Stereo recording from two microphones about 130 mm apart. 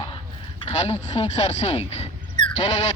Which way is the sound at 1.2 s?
55° left (ahead or behind).